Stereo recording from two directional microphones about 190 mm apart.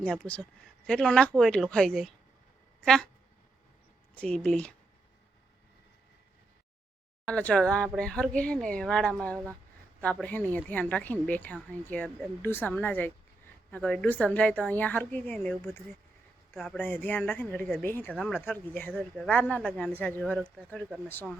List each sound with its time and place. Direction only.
0.0 s speech: 5° left (ahead or behind)
4.1 s speech: 5° left (ahead or behind)
7.3 s speech: 5° left (ahead or behind)